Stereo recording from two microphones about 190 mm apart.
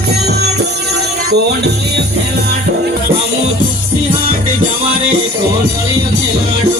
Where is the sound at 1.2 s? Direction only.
60° right (ahead or behind).